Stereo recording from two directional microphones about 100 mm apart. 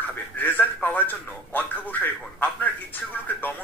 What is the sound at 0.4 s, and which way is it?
Speech, 20° left (ahead or behind).